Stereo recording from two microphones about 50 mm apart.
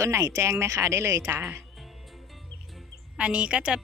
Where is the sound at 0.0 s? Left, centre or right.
Right.